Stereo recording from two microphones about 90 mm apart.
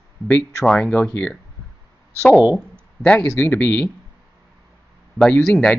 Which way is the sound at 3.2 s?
20° left (ahead or behind).